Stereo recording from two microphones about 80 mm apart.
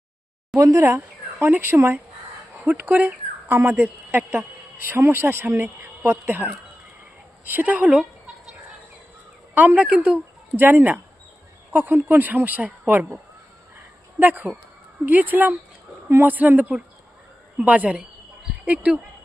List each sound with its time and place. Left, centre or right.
0.5 s speech: right; by 7.9 s centre
9.6 s speech: centre
10.5 s speech: right
14.2 s speech: right